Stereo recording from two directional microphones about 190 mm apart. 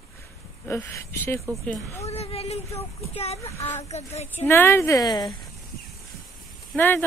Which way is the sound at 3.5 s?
15° left (ahead or behind).